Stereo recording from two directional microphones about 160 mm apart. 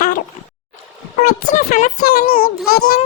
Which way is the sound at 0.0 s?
60° left (ahead or behind).